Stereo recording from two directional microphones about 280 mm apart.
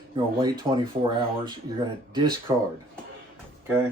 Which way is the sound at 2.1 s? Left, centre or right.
Centre.